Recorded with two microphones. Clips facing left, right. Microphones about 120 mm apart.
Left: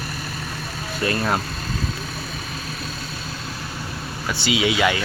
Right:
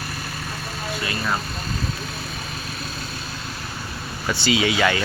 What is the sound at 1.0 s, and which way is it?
Speech, 45° left (ahead or behind).